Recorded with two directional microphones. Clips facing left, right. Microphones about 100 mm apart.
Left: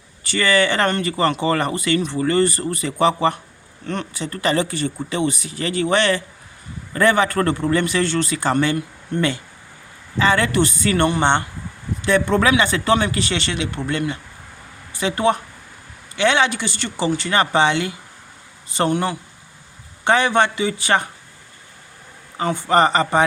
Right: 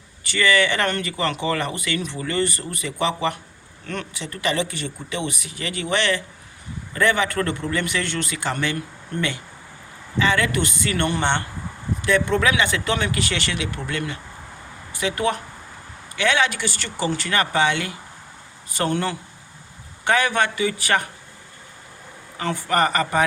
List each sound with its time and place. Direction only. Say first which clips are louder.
0.3 s speech: left 2 dB; 35° left (ahead or behind)
10.2 s speech: left 3 dB; 30° left (ahead or behind)
11.1 s speech: left 4 dB; 20° left (ahead or behind)
12.0 s speech: left 3 dB; 35° left (ahead or behind)
22.4 s speech: left 4 dB; 25° left (ahead or behind)